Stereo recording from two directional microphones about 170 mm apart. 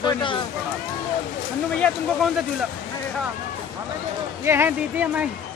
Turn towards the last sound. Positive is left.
turn(degrees=-10)  # may be behind; listen again after turning